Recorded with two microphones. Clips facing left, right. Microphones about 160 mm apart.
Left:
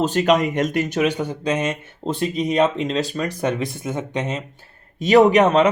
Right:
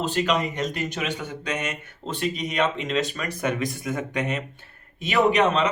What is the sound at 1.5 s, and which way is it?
Speech, 30° left (ahead or behind).